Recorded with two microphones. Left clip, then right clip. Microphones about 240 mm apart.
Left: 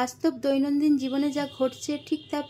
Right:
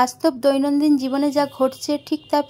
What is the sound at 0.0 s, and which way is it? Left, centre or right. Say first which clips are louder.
A woman's voice: right 9 dB; right.